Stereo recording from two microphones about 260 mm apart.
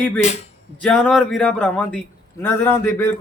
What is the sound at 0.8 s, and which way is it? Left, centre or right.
A man's voice, centre.